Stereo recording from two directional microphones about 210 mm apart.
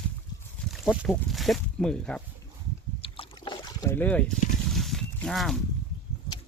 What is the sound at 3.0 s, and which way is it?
Boat, 25° left (ahead or behind).